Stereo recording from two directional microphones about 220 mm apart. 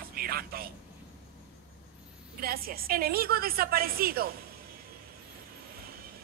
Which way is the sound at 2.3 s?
40° right (ahead or behind).